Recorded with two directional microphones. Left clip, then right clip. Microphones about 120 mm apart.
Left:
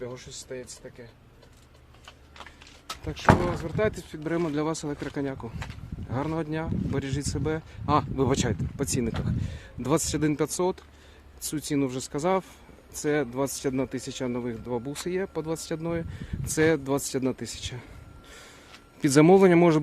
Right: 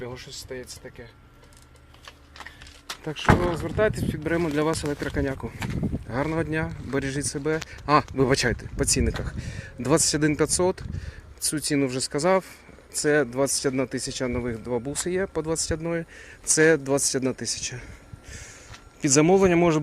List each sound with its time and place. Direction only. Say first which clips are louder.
0.0 s speech: right 2 dB; 15° right (ahead or behind)
3.0 s speech: even; 10° right (ahead or behind); by 15.8 s 5° left (ahead or behind)
15.8 s speech: right 3 dB; 20° left (ahead or behind)
16.6 s speech: right 4 dB; 5° left (ahead or behind)
19.1 s speech: left 1 dB; 45° left (ahead or behind)